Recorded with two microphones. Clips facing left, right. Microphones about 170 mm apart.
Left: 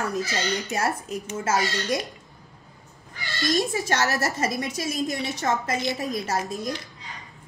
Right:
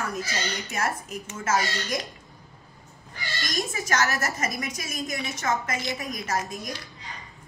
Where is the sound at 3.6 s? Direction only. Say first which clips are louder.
Left 2 dB; 35° left (ahead or behind).